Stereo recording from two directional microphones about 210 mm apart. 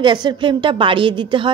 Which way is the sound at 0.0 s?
20° right (ahead or behind).